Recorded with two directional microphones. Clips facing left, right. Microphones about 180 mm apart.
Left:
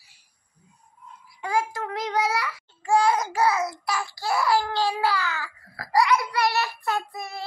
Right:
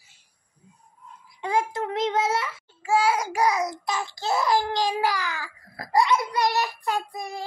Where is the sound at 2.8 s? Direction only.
5° right (ahead or behind).